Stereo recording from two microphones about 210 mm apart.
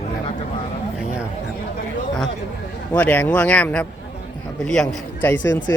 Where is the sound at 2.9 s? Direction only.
5° left (ahead or behind).